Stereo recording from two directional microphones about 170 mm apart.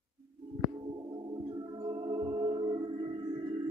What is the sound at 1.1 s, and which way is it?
Music, 25° right (ahead or behind).